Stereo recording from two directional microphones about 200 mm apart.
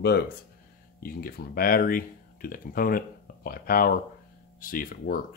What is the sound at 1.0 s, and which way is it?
Speech, 50° left (ahead or behind).